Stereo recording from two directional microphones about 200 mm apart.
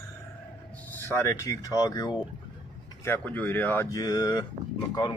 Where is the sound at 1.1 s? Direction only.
15° left (ahead or behind).